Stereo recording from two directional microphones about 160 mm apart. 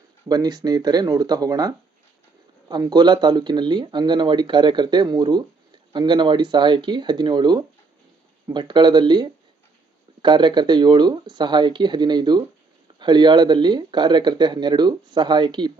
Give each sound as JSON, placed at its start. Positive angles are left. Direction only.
{"t": 0.3, "sound": "speech", "side_deg": -25}